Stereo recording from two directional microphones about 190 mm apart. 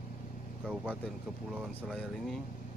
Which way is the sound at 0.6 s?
5° right (ahead or behind).